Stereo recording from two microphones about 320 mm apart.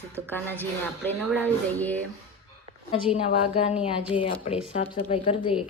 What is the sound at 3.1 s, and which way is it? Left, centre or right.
A woman's voice, centre.